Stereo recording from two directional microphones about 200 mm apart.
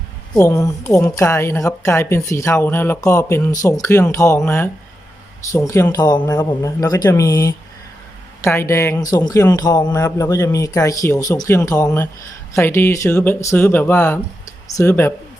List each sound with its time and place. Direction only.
0.3 s a man's voice: 15° left (ahead or behind)